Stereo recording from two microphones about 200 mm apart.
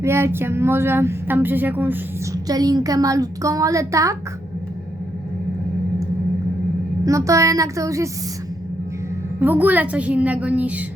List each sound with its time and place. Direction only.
0.0 s speech: 15° right (ahead or behind)
7.0 s speech: 15° right (ahead or behind)
9.4 s speech: 10° right (ahead or behind)